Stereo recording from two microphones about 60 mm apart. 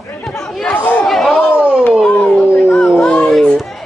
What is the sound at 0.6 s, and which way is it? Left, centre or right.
Chatter, left.